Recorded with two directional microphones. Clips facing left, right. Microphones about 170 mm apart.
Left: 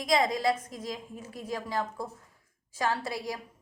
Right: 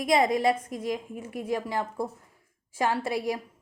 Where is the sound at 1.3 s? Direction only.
15° right (ahead or behind).